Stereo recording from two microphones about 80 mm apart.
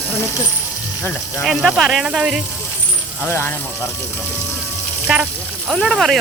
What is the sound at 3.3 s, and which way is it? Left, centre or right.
Speech, left.